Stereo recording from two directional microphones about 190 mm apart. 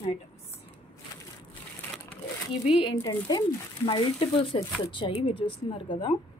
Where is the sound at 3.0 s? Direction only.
20° left (ahead or behind).